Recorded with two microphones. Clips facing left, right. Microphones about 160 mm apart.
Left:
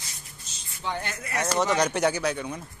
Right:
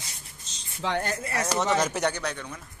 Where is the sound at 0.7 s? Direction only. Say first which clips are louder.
Right 4 dB; 70° right (ahead or behind).